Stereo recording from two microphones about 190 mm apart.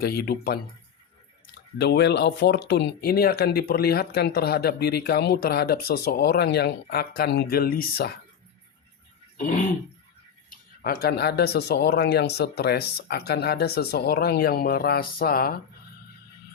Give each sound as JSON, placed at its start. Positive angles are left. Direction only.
{"t": 0.0, "sound": "speech", "side_deg": 55}
{"t": 1.8, "sound": "speech", "side_deg": 60}
{"t": 9.4, "sound": "a sound", "side_deg": 45}
{"t": 10.5, "sound": "speech", "side_deg": 50}